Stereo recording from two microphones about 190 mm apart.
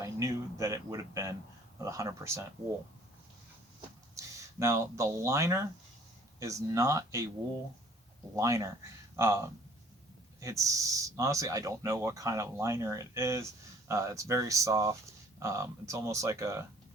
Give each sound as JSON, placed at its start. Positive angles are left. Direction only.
{"t": 0.0, "sound": "speech", "side_deg": -15}
{"t": 4.1, "sound": "speech", "side_deg": -15}
{"t": 8.4, "sound": "speech", "side_deg": -15}